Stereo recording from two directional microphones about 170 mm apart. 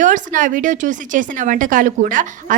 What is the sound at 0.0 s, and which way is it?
Speech, 50° right (ahead or behind).